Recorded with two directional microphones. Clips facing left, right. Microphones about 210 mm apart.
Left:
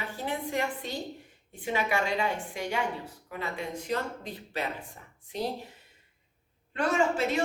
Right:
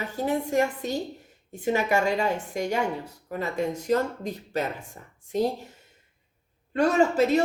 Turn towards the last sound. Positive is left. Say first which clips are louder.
# right 6 dB
turn(degrees=-40)  # may be behind; listen again after turning